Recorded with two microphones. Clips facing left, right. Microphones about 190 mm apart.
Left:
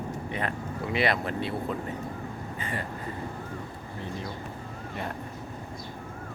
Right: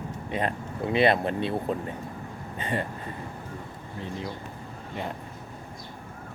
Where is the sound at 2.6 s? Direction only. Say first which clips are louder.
Right 6 dB; 25° right (ahead or behind).